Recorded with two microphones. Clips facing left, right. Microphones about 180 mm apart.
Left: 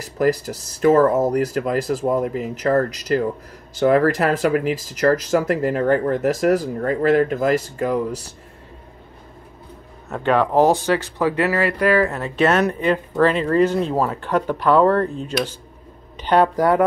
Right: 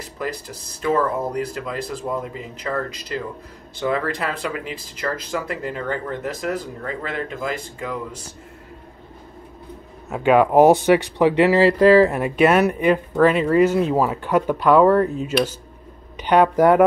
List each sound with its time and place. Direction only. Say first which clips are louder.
0.8 s speech: left 7 dB; 45° left (ahead or behind)
3.8 s speech: left 7 dB; 50° left (ahead or behind)
10.0 s speech: right 3 dB; 5° right (ahead or behind); by 12.1 s 30° right (ahead or behind)
12.1 s speech: right 2 dB; 10° right (ahead or behind)